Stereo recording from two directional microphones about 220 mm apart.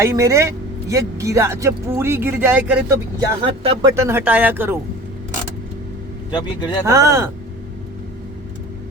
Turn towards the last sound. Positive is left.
turn(degrees=-15)  # may be behind; listen again after turning